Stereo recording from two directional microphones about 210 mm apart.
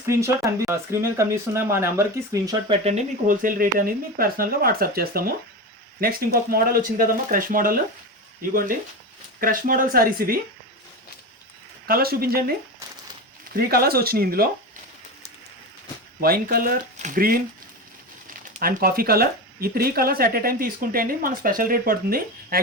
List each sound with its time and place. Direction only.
0.1 s speech: 15° right (ahead or behind)
2.6 s speech: 30° right (ahead or behind)
11.9 s speech: 45° right (ahead or behind)
13.7 s speech: 45° right (ahead or behind)
16.2 s speech: 45° right (ahead or behind)
18.6 s speech: 45° right (ahead or behind)